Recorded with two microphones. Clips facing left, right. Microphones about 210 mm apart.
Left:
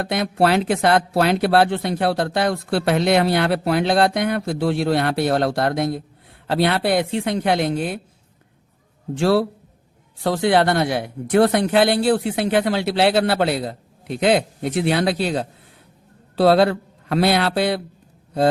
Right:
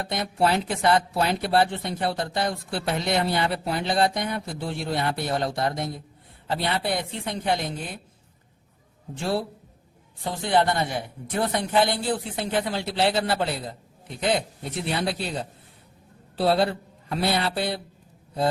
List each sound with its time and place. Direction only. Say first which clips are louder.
0.0 s speech: left 5 dB; 70° left (ahead or behind)
9.1 s a man's voice: left 9 dB; 80° left